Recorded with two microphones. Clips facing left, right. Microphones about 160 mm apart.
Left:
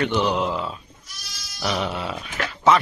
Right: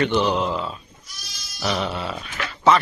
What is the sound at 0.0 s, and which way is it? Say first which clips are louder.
Speech: right 1 dB; 10° left (ahead or behind).